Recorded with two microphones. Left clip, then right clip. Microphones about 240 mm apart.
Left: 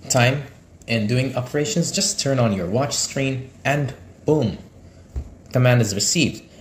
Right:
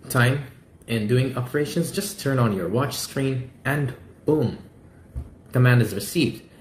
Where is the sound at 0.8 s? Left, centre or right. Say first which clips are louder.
Left 1 dB; left.